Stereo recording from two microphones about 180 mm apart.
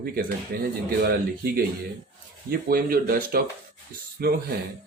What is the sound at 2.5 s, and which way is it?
Speech, 55° right (ahead or behind).